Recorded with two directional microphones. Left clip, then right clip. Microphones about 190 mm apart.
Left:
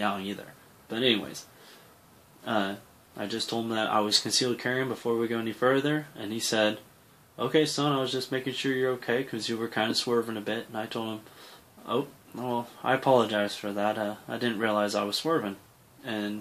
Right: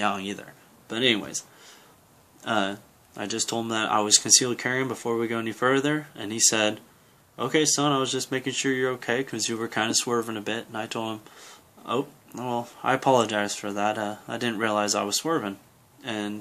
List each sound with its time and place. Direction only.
0.8 s speech: 30° right (ahead or behind)
2.4 s speech: 25° right (ahead or behind)